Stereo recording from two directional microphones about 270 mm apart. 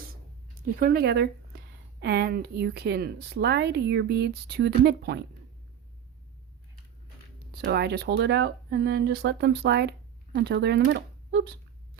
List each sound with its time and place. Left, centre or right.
0.5 s speech: right
7.5 s speech: right